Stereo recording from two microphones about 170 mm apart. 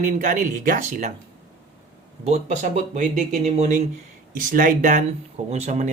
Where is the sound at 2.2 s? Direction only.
40° right (ahead or behind).